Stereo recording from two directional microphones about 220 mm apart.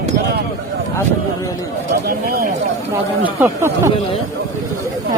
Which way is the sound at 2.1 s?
40° right (ahead or behind).